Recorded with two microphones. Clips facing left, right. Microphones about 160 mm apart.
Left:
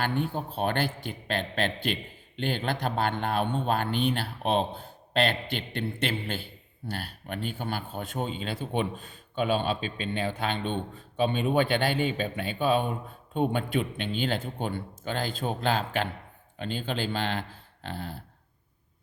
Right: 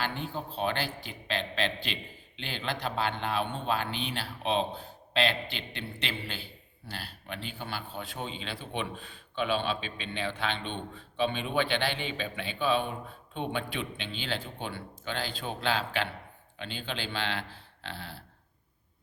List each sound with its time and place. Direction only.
0.0 s a man's voice: 50° left (ahead or behind)